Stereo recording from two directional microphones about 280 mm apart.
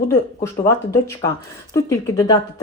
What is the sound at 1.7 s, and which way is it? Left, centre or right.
Speech, centre.